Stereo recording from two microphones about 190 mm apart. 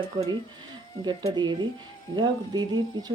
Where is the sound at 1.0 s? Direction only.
25° right (ahead or behind).